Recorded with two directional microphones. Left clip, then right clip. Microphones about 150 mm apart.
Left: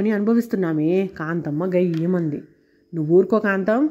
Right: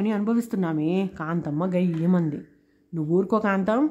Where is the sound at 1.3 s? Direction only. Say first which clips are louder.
Left 5 dB; 15° left (ahead or behind).